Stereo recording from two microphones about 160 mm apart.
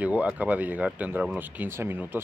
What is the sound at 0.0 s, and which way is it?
Speech, 10° right (ahead or behind).